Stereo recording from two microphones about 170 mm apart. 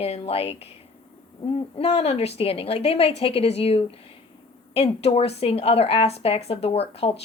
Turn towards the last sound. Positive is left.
turn(degrees=35)  # may be behind; listen again after turning